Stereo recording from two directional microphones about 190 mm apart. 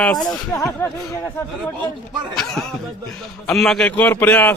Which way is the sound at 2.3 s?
Centre (ahead or behind).